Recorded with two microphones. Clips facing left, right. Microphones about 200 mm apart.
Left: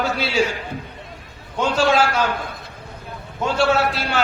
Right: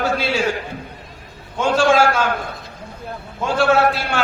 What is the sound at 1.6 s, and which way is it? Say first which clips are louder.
Speech: right 3 dB; 50° right (ahead or behind).